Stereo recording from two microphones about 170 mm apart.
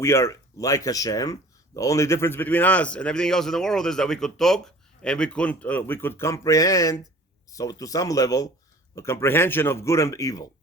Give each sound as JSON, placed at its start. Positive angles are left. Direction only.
{"t": 0.0, "sound": "speech", "side_deg": 15}